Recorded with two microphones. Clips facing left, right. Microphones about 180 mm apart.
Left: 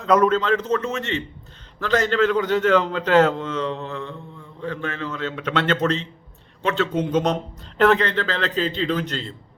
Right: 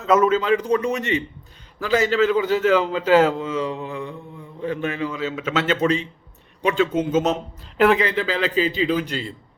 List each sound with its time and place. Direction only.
0.0 s a man's voice: 5° right (ahead or behind)